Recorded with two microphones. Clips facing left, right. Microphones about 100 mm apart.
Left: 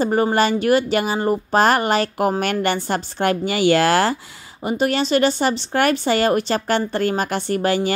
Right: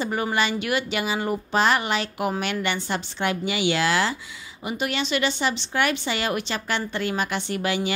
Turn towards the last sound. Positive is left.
turn(degrees=40)  # may be behind; listen again after turning